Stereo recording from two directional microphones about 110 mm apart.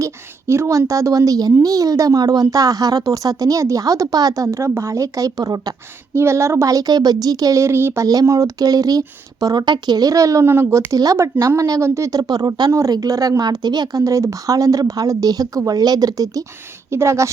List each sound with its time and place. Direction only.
0.0 s a woman's voice: 25° right (ahead or behind)
6.1 s speech: 25° right (ahead or behind)
8.0 s speech: 35° right (ahead or behind)